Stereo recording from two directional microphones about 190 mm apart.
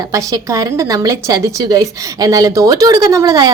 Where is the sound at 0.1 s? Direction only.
15° right (ahead or behind).